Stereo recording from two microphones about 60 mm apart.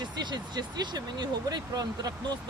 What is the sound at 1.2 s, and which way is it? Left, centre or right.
Speech, right.